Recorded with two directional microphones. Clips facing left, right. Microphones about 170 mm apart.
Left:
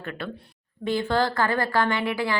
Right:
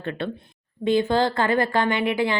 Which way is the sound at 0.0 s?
25° right (ahead or behind).